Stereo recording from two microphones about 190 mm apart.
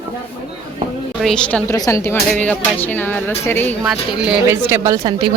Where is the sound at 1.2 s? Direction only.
5° left (ahead or behind).